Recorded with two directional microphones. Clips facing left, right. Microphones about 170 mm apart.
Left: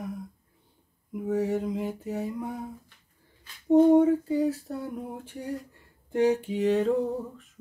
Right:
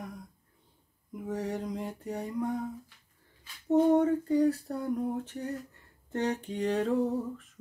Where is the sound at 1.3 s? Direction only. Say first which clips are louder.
Left 7 dB; 5° left (ahead or behind).